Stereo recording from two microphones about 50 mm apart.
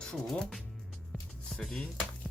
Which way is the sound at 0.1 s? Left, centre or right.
Centre.